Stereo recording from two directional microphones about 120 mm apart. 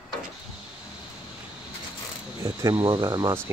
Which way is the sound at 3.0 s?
25° right (ahead or behind).